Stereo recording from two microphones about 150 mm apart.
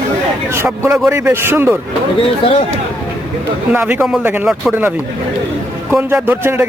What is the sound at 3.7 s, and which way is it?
Speech, 10° right (ahead or behind).